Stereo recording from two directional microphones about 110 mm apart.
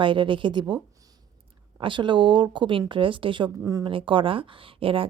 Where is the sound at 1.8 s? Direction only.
45° right (ahead or behind).